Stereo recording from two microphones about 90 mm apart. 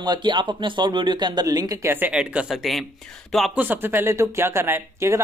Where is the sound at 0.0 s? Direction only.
55° right (ahead or behind).